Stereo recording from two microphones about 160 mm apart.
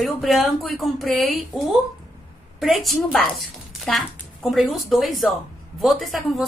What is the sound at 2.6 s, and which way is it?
A woman's voice, centre (ahead or behind).